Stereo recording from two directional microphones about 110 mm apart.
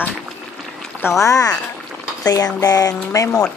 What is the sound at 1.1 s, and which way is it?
Speech, 30° left (ahead or behind).